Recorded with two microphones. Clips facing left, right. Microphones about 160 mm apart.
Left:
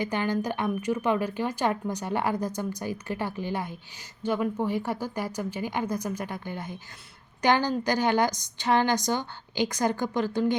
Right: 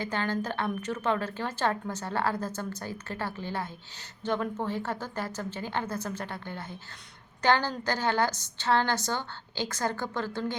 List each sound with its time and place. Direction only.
0.0 s a woman's voice: 15° left (ahead or behind)